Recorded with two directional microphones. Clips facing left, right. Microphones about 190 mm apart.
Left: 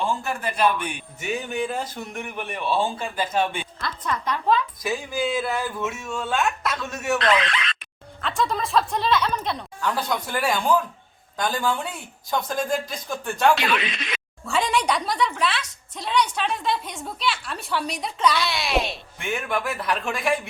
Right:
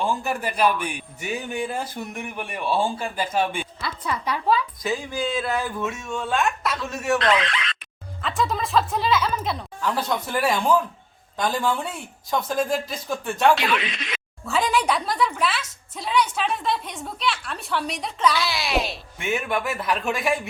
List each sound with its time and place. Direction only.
0.0 s a woman's voice: 15° right (ahead or behind)
7.5 s a sound: 60° left (ahead or behind)
8.2 s a woman's voice: centre (ahead or behind)
13.8 s speech: 55° left (ahead or behind)
14.4 s a woman's voice: centre (ahead or behind)